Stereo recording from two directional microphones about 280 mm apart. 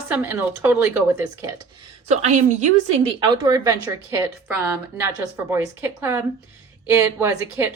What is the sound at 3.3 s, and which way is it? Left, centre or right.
A woman's voice, centre.